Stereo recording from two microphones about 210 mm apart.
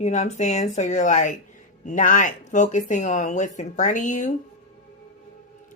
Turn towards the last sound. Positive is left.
turn(degrees=35)  # may be behind; listen again after turning